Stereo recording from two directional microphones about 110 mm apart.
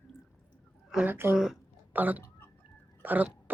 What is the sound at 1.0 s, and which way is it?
A woman's voice, 20° right (ahead or behind).